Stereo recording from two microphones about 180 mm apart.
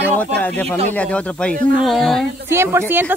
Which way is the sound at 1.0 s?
5° left (ahead or behind).